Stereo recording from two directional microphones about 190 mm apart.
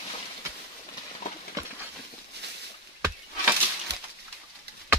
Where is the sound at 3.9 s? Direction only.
60° right (ahead or behind).